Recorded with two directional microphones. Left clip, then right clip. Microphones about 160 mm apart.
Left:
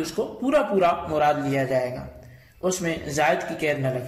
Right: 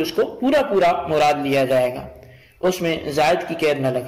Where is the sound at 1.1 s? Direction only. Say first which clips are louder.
Right 5 dB; 30° right (ahead or behind).